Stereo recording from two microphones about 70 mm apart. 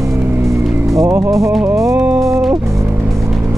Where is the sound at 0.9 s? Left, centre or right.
Right.